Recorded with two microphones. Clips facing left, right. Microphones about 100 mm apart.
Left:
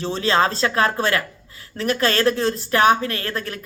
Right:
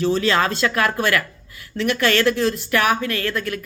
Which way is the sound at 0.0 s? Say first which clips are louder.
Right 1 dB; 30° left (ahead or behind).